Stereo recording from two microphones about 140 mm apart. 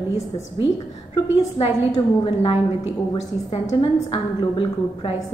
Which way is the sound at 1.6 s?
45° left (ahead or behind).